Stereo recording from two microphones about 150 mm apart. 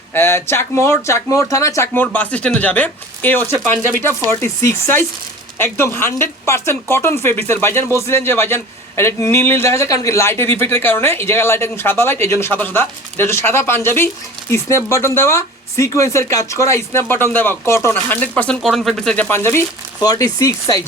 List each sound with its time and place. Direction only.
0.1 s a man's voice: 15° left (ahead or behind)